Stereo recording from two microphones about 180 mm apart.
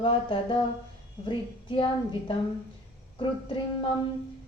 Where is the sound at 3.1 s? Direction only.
30° left (ahead or behind).